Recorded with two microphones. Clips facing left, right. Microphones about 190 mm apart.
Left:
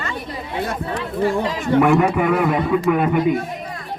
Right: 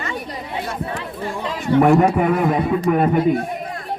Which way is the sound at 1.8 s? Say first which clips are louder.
Right 2 dB; 40° right (ahead or behind).